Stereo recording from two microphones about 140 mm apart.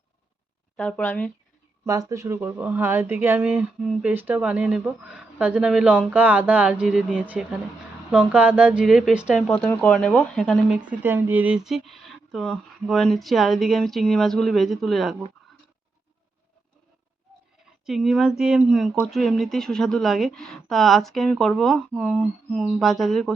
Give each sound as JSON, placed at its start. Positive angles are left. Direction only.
{"t": 0.8, "sound": "speech", "side_deg": 5}
{"t": 1.8, "sound": "speech", "side_deg": -20}
{"t": 9.6, "sound": "speech", "side_deg": 10}
{"t": 10.8, "sound": "speech", "side_deg": -15}
{"t": 17.8, "sound": "speech", "side_deg": 0}